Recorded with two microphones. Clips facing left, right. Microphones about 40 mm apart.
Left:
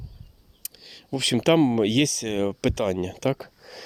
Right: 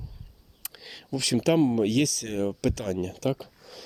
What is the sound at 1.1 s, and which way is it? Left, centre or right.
Speech, left.